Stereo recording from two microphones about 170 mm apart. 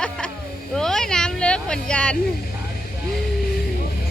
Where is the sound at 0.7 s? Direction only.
5° left (ahead or behind).